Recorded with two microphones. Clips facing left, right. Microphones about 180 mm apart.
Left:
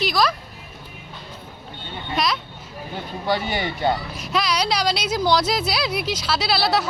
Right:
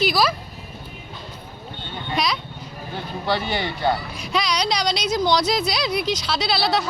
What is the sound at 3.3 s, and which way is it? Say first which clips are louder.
Speech: left 1 dB; 15° left (ahead or behind).